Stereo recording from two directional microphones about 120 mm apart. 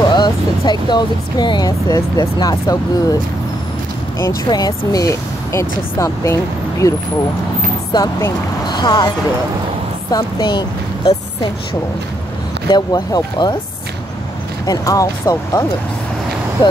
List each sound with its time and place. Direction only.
0.0 s speech: 35° left (ahead or behind)
4.5 s speech: 35° left (ahead or behind)
7.9 s speech: 35° left (ahead or behind)
10.1 s speech: 40° left (ahead or behind)
12.6 s speech: 35° left (ahead or behind)
14.7 s speech: 30° left (ahead or behind)